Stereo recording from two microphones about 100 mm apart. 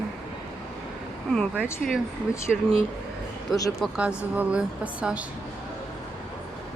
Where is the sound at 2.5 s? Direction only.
Centre (ahead or behind).